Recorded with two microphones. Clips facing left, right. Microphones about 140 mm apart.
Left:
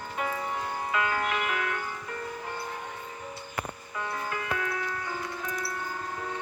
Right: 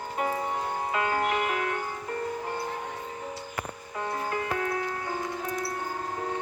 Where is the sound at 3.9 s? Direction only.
35° right (ahead or behind).